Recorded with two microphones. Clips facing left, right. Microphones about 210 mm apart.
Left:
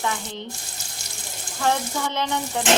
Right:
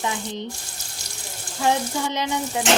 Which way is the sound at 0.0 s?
15° right (ahead or behind).